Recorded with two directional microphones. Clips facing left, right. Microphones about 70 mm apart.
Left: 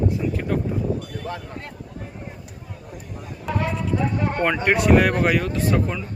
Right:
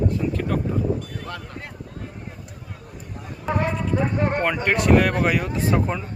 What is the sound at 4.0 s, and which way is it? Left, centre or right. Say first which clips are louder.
Speech: right 3 dB; right.